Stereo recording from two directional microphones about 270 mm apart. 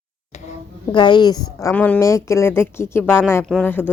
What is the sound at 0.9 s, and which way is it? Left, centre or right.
A woman's voice, centre.